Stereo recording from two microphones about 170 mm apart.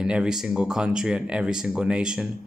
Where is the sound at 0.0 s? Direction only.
5° right (ahead or behind).